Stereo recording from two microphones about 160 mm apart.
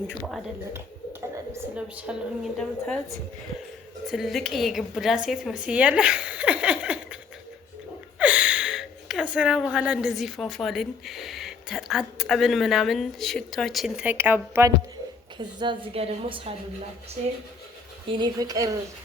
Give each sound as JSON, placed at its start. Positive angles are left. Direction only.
{"t": 1.7, "sound": "a woman's voice", "side_deg": -10}
{"t": 2.6, "sound": "a woman's voice", "side_deg": 5}
{"t": 4.0, "sound": "a woman's voice", "side_deg": 0}
{"t": 8.2, "sound": "speech", "side_deg": -10}
{"t": 15.4, "sound": "a woman's voice", "side_deg": -30}
{"t": 18.1, "sound": "a woman's voice", "side_deg": -25}